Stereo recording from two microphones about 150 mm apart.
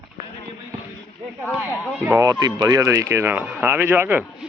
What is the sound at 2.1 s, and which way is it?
Speech, 20° right (ahead or behind).